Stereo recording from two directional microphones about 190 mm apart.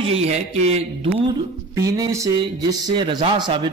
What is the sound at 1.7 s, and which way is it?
Speech, 20° right (ahead or behind).